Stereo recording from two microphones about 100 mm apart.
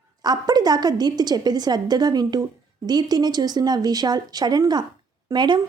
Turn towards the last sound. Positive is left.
turn(degrees=-50)  # may be behind; listen again after turning